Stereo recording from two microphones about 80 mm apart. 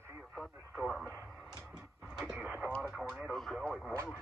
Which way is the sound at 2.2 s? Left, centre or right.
Centre.